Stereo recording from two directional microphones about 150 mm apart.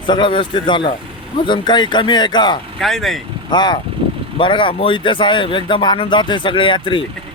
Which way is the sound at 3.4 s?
30° left (ahead or behind).